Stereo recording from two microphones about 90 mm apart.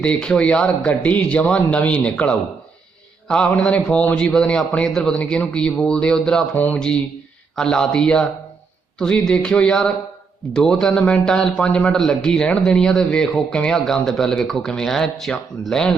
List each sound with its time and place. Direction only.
0.0 s a man's voice: 10° left (ahead or behind)
6.5 s a sound: 20° left (ahead or behind)
6.7 s a man's voice: 10° left (ahead or behind)